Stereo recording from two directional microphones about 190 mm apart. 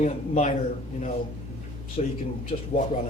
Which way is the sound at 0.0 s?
35° left (ahead or behind).